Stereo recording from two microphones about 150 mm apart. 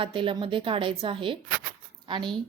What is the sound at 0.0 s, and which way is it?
Speech, 35° right (ahead or behind).